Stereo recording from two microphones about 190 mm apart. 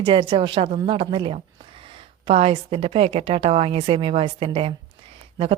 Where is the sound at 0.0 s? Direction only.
25° right (ahead or behind).